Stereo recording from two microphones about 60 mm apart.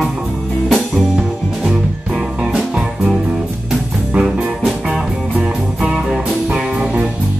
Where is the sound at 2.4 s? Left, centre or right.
Centre.